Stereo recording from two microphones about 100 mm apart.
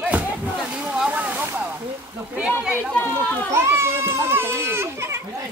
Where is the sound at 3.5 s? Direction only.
25° right (ahead or behind).